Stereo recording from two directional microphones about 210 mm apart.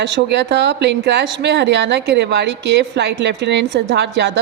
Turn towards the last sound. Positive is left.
turn(degrees=-55)  # may be behind; listen again after turning